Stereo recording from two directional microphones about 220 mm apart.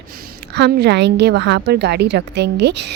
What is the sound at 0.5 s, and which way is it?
Speech, 50° right (ahead or behind).